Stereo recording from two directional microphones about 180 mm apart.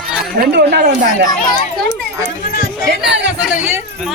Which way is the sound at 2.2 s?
55° left (ahead or behind).